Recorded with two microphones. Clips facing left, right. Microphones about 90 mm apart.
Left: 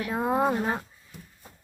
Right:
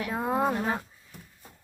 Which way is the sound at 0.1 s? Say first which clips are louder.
Left 2 dB; 5° left (ahead or behind).